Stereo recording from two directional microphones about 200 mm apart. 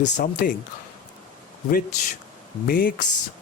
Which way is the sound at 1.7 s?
40° left (ahead or behind).